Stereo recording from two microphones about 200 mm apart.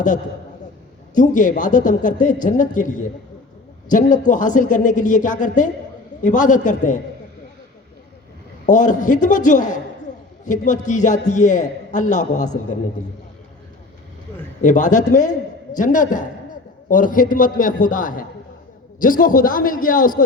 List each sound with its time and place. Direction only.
1.1 s a man's voice: 40° left (ahead or behind)
8.6 s a man's voice: 40° left (ahead or behind)
14.6 s a man's voice: 40° left (ahead or behind)